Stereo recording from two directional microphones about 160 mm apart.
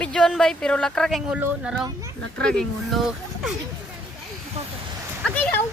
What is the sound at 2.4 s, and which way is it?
Speech, 5° left (ahead or behind).